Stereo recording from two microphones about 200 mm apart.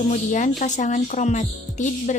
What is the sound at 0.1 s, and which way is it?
Speech, 40° left (ahead or behind).